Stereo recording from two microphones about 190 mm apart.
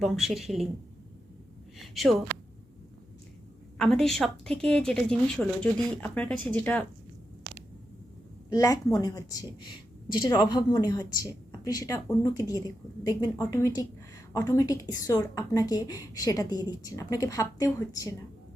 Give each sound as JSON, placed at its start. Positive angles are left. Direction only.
{"t": 0.0, "sound": "speech", "side_deg": 0}
{"t": 2.0, "sound": "speech", "side_deg": 0}
{"t": 3.8, "sound": "speech", "side_deg": 0}
{"t": 7.5, "sound": "a sound", "side_deg": 20}
{"t": 8.4, "sound": "a woman's voice", "side_deg": 15}